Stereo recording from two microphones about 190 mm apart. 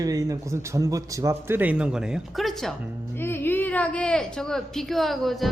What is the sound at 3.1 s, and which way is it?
A woman's voice, 10° left (ahead or behind).